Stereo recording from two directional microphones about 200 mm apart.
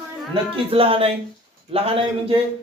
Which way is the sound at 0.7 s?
30° right (ahead or behind).